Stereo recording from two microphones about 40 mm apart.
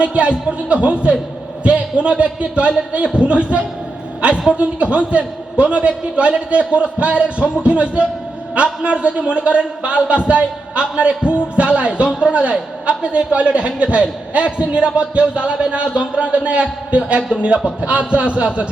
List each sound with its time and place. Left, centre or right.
0.0 s a man's voice: right